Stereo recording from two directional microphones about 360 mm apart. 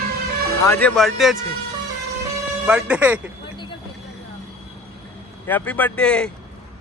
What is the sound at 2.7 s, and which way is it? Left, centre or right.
Speech, centre.